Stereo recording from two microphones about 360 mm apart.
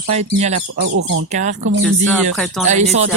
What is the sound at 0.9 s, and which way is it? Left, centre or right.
Speech, right.